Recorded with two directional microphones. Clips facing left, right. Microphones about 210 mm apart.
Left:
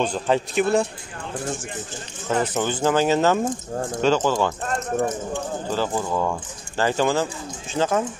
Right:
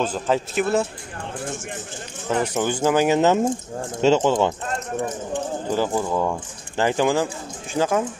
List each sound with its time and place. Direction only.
0.0 s a man's voice: 5° right (ahead or behind)
2.2 s speech: 10° right (ahead or behind)
5.7 s speech: 10° right (ahead or behind)